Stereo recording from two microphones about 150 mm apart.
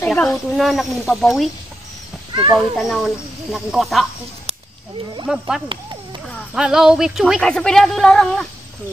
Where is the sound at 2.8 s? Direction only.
Centre (ahead or behind).